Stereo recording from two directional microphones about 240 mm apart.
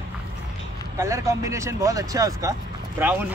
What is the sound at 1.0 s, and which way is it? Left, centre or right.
Speech, centre.